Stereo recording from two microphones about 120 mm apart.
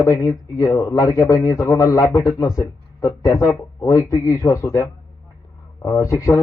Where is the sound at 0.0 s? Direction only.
25° left (ahead or behind).